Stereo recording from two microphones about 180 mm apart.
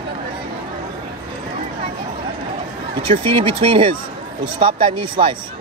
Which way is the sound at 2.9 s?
30° right (ahead or behind).